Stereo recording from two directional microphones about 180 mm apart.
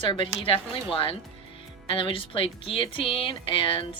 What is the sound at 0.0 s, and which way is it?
Speech, 30° left (ahead or behind).